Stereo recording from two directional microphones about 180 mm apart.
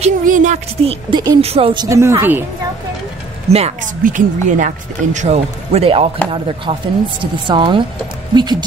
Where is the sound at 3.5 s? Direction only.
35° right (ahead or behind).